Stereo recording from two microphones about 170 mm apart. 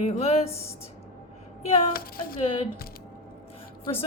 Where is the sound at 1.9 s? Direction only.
60° left (ahead or behind).